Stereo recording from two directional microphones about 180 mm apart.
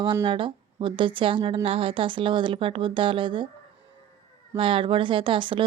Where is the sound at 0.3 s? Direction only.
30° right (ahead or behind).